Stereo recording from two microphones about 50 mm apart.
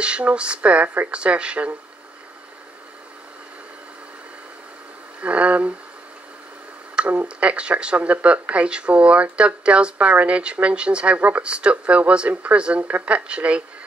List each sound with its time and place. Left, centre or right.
0.0 s speech: right
5.2 s speech: right
7.0 s a sound: right
7.3 s speech: right